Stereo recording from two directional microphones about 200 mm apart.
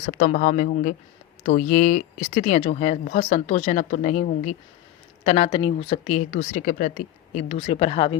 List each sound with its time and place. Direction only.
0.0 s speech: 45° left (ahead or behind)
7.3 s speech: 30° left (ahead or behind)